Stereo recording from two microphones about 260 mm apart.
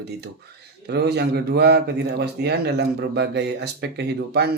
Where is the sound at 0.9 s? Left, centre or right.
Right.